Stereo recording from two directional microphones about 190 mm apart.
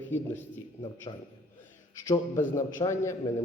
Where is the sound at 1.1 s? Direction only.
25° left (ahead or behind).